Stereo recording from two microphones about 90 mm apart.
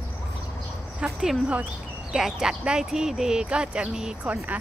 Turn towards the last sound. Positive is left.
turn(degrees=-15)  # may be behind; listen again after turning